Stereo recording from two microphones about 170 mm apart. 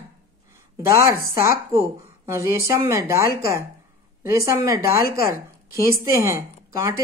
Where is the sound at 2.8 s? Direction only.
15° right (ahead or behind).